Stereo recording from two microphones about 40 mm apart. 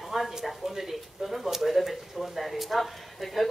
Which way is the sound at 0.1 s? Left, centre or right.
Centre.